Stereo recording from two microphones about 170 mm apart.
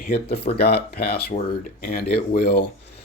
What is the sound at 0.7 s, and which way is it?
Speech, 70° left (ahead or behind).